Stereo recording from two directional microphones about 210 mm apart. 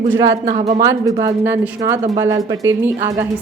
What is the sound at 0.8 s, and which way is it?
A woman's voice, 15° right (ahead or behind).